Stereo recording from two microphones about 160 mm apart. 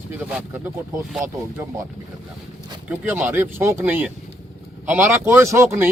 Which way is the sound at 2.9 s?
15° right (ahead or behind).